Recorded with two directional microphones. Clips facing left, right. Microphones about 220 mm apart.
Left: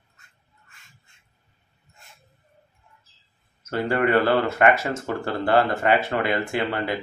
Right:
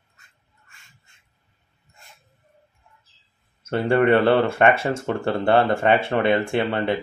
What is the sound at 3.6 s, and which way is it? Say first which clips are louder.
Speech: right 4 dB; 30° right (ahead or behind).